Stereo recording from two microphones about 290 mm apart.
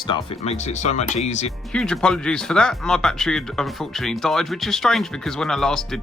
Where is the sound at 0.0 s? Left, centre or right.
Centre.